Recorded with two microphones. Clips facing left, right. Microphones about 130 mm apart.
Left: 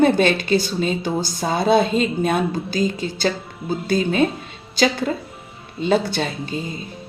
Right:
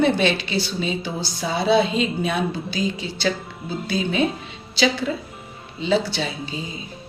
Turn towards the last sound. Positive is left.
turn(degrees=50)  # may be behind; listen again after turning